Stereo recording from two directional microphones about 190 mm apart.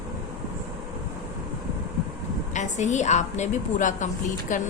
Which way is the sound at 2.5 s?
40° left (ahead or behind).